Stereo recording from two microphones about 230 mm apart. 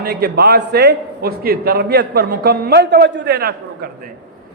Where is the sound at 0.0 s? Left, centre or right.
Right.